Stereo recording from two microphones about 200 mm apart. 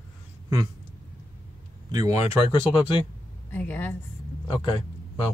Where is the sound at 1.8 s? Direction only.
20° right (ahead or behind).